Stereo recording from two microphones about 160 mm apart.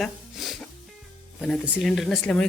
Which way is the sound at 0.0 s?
Centre (ahead or behind).